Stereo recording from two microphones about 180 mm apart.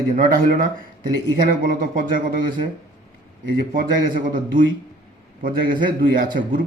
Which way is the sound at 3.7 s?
50° right (ahead or behind).